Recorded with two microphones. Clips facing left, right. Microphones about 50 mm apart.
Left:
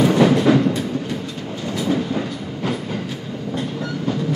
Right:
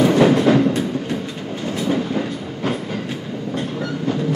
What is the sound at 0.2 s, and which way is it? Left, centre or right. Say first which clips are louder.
Music: right 1 dB; centre.